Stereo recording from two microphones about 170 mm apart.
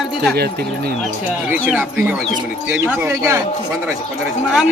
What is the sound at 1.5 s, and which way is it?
Speech, 10° right (ahead or behind).